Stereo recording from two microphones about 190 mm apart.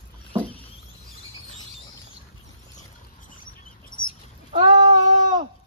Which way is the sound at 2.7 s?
45° left (ahead or behind).